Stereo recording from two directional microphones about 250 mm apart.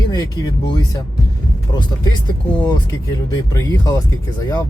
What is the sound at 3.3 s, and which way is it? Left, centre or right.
Speech, centre.